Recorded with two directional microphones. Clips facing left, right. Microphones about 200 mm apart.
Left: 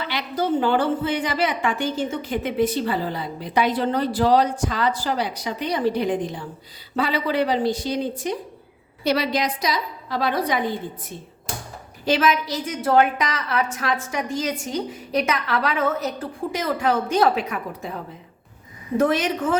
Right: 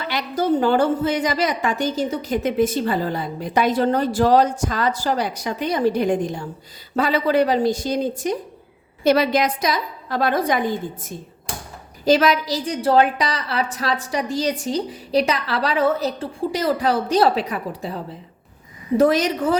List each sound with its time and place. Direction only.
0.0 s a woman's voice: 45° right (ahead or behind)